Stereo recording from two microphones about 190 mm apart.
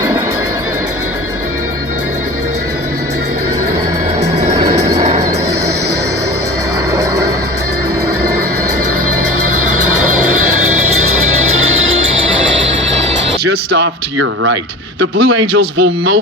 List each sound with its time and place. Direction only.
12.5 s music: 75° right (ahead or behind)
13.7 s speech: 60° right (ahead or behind)